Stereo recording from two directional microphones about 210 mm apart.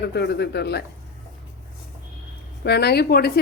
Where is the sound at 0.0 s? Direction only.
50° left (ahead or behind).